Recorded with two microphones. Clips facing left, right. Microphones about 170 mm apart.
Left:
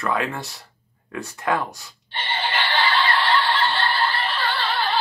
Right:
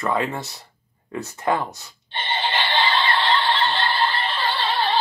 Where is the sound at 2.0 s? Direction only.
25° right (ahead or behind).